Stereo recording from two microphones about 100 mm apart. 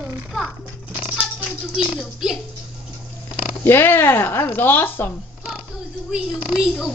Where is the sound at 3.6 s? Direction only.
25° left (ahead or behind).